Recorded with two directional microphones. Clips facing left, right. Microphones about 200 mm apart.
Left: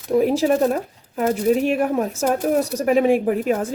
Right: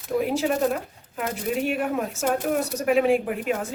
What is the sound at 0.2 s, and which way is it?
Speech, 40° left (ahead or behind).